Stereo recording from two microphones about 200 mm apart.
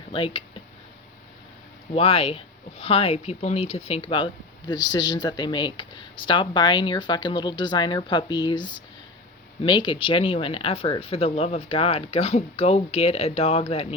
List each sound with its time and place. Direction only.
0.1 s speech: 25° left (ahead or behind)
1.9 s speech: 30° left (ahead or behind)